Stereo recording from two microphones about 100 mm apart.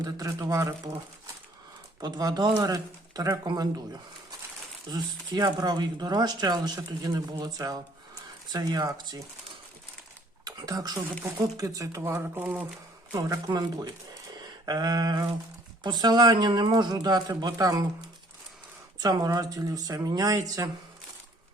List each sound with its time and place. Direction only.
0.0 s speech: 35° right (ahead or behind)
2.0 s speech: 45° right (ahead or behind)
4.9 s speech: 45° right (ahead or behind)
10.4 s speech: 40° right (ahead or behind)
12.4 s speech: 15° right (ahead or behind)
13.1 s speech: 35° right (ahead or behind)